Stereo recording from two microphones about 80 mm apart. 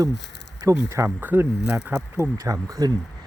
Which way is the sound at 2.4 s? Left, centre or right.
Right.